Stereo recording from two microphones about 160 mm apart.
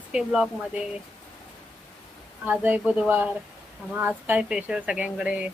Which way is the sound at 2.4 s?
10° right (ahead or behind).